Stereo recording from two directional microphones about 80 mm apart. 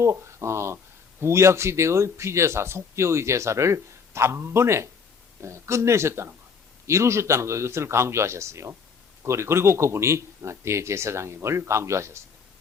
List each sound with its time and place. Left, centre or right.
0.0 s speech: right